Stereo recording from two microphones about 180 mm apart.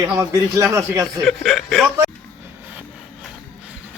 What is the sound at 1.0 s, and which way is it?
Speech, centre (ahead or behind).